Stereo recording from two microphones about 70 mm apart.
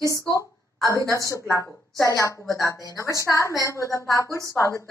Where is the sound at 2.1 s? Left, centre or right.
Left.